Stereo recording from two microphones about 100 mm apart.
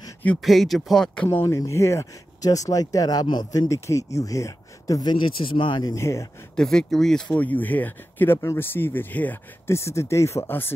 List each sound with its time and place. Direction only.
0.4 s speech: centre (ahead or behind)
1.3 s speech: 25° left (ahead or behind); by 3.6 s 45° left (ahead or behind)
3.6 s speech: 30° left (ahead or behind)
5.1 s speech: 55° left (ahead or behind)
5.9 s speech: 30° left (ahead or behind)
6.5 s speech: 5° left (ahead or behind); by 10.7 s 20° left (ahead or behind)